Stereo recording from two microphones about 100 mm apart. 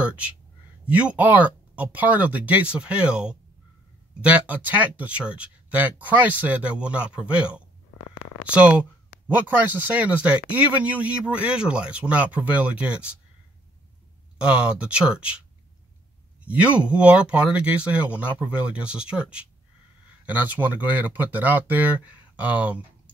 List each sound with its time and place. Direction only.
0.8 s speech: 15° right (ahead or behind)
9.9 s speech: 15° right (ahead or behind)
14.4 s speech: 10° right (ahead or behind)
16.4 s speech: 15° right (ahead or behind)